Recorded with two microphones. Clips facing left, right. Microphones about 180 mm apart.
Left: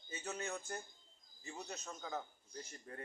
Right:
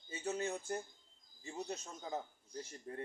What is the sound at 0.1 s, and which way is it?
A man's voice, 30° right (ahead or behind).